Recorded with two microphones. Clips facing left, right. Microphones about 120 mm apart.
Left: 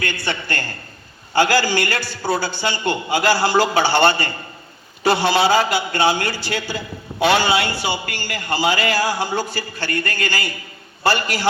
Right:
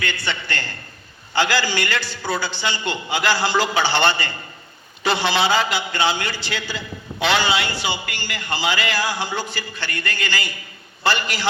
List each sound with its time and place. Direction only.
0.0 s a man's voice: 45° left (ahead or behind)